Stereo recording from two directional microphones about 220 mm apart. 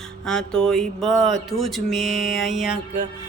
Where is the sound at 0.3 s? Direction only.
5° left (ahead or behind).